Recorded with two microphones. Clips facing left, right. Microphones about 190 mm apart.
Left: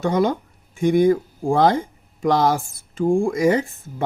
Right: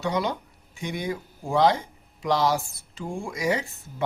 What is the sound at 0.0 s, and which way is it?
Speech, 50° left (ahead or behind).